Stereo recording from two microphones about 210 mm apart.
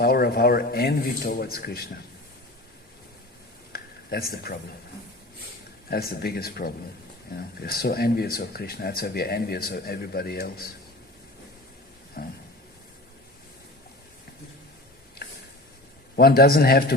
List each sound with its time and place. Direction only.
0.0 s speech: 45° left (ahead or behind)
3.7 s a sound: 45° left (ahead or behind)
5.9 s speech: 45° left (ahead or behind)
12.2 s speech: 45° left (ahead or behind)
16.1 s speech: 45° left (ahead or behind)